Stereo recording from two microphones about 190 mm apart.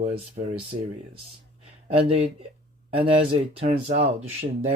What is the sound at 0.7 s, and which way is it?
Speech, 30° right (ahead or behind).